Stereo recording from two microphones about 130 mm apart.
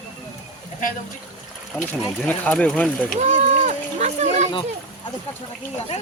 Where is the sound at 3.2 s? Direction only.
65° right (ahead or behind).